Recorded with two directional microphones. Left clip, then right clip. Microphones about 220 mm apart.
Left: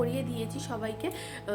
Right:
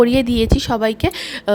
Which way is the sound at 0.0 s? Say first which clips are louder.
Right 18 dB; 45° right (ahead or behind).